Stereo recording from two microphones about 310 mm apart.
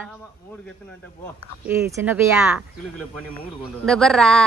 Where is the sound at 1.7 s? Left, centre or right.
Centre.